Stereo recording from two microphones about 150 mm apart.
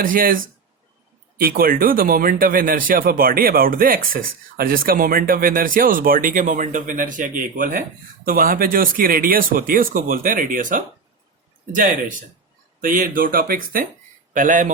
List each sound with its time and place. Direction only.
0.0 s speech: 70° right (ahead or behind)
1.4 s speech: 75° right (ahead or behind)
14.3 s speech: 60° right (ahead or behind)